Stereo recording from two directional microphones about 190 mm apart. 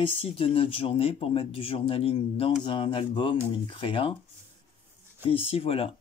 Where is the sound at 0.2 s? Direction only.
30° left (ahead or behind).